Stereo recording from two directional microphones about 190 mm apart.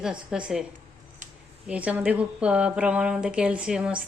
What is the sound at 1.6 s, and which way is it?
A woman's voice, 5° right (ahead or behind).